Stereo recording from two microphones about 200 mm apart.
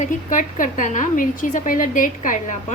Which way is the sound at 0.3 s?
40° left (ahead or behind).